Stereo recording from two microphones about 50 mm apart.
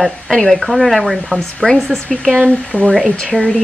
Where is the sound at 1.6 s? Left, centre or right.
Centre.